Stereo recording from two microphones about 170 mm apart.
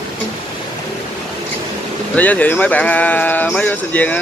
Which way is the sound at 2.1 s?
10° left (ahead or behind).